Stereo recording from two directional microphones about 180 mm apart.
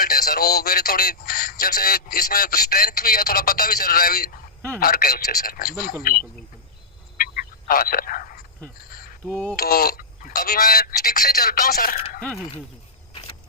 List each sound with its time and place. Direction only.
0.0 s speech: 55° left (ahead or behind)
7.2 s a sound: 55° left (ahead or behind)
9.3 s speech: 5° left (ahead or behind)
9.6 s speech: 55° left (ahead or behind)